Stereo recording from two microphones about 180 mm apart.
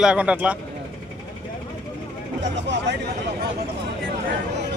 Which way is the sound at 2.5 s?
75° right (ahead or behind).